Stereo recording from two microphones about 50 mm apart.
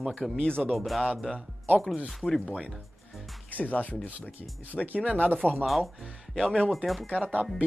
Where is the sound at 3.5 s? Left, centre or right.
Left.